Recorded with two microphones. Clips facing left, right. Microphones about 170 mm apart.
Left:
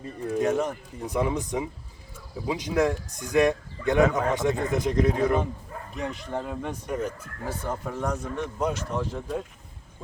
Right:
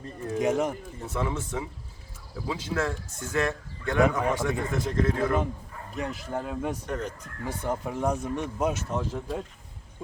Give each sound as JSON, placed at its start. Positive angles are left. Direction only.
{"t": 0.3, "sound": "speech", "side_deg": -15}
{"t": 1.0, "sound": "speech", "side_deg": 15}
{"t": 6.0, "sound": "speech", "side_deg": -5}
{"t": 6.8, "sound": "speech", "side_deg": 10}
{"t": 7.4, "sound": "speech", "side_deg": -15}